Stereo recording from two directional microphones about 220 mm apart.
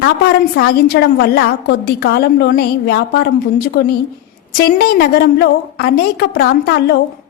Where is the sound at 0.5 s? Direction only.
45° left (ahead or behind).